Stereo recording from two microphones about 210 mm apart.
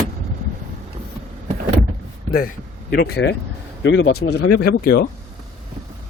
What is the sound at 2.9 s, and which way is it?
Speech, 50° left (ahead or behind).